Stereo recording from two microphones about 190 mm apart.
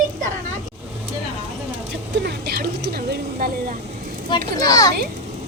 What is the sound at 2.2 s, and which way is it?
Speech, 55° right (ahead or behind).